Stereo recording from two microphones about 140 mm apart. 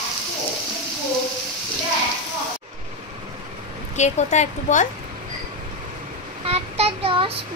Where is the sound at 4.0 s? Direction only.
55° left (ahead or behind).